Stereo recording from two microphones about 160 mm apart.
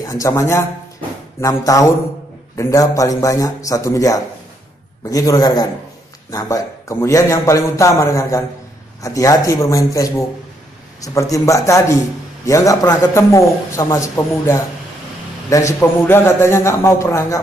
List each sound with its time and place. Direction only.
0.0 s a man's voice: 20° left (ahead or behind)